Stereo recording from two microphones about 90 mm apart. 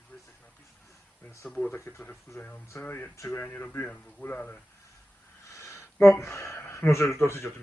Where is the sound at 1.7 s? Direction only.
25° left (ahead or behind).